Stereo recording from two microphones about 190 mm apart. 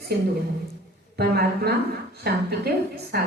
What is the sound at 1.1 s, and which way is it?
A woman's voice, 55° right (ahead or behind).